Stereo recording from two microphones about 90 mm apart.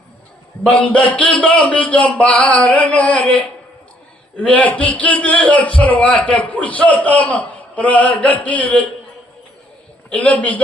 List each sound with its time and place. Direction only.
0.6 s a man's voice: 10° left (ahead or behind)
4.4 s a man's voice: 15° left (ahead or behind)
10.1 s a man's voice: 15° left (ahead or behind)